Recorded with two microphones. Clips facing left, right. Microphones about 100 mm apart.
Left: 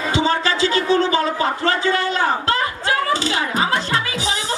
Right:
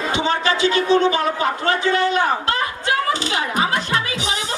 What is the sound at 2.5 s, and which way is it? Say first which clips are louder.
Music: left 1 dB; 35° left (ahead or behind).